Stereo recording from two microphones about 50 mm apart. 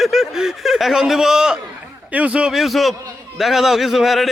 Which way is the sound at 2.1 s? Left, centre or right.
Right.